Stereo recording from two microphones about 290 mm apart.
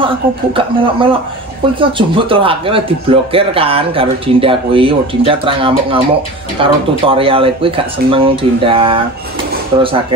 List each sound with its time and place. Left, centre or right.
0.0 s speech: centre